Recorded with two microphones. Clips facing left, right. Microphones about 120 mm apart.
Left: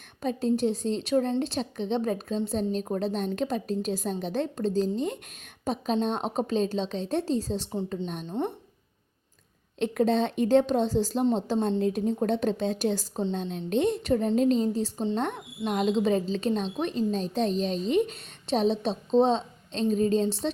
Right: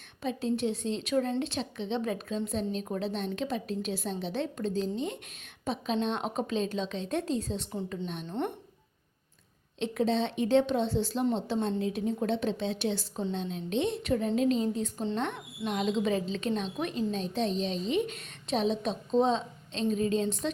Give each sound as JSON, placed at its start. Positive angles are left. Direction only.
{"t": 0.2, "sound": "a woman's voice", "side_deg": 40}
{"t": 9.8, "sound": "a woman's voice", "side_deg": 50}